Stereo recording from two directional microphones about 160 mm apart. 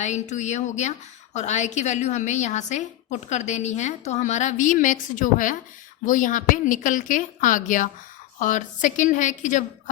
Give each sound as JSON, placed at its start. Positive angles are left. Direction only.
{"t": 0.0, "sound": "a woman's voice", "side_deg": 45}